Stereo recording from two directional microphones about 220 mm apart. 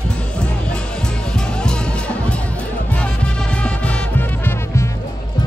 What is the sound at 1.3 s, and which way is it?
Music, 5° left (ahead or behind).